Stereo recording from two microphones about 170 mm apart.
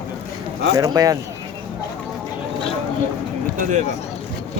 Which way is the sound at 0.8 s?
20° right (ahead or behind).